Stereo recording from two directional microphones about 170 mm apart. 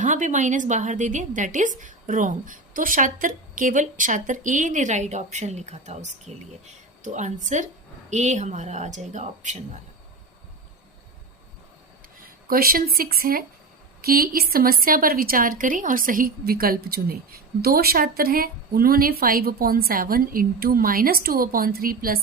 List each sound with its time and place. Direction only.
0.0 s a woman's voice: 45° right (ahead or behind)
12.5 s a woman's voice: 60° right (ahead or behind)